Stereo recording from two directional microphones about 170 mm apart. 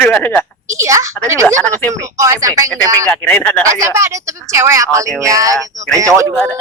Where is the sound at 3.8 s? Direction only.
15° right (ahead or behind).